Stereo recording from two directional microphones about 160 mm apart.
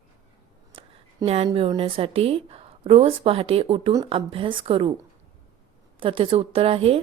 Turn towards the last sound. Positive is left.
turn(degrees=-35)  # may be behind; listen again after turning